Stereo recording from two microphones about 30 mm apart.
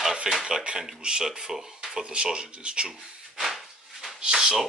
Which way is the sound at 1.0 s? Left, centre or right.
Right.